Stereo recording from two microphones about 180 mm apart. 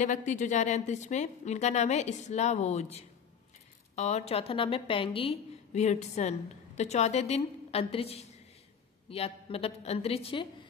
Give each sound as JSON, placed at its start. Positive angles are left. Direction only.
{"t": 0.0, "sound": "a woman's voice", "side_deg": 45}